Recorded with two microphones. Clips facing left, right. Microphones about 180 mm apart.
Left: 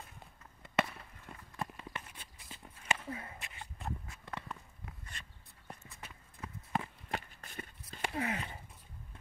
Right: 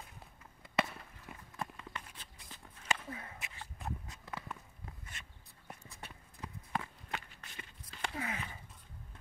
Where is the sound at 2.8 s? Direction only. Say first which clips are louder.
Left 1 dB; 5° left (ahead or behind).